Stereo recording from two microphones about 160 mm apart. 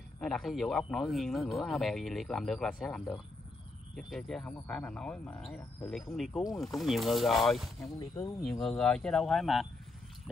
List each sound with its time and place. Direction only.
0.2 s speech: centre (ahead or behind)
6.1 s speech: centre (ahead or behind)
7.9 s speech: 20° left (ahead or behind)
8.4 s speech: centre (ahead or behind)